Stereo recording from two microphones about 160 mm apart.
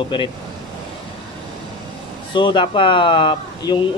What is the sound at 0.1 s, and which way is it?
Speech, 30° left (ahead or behind).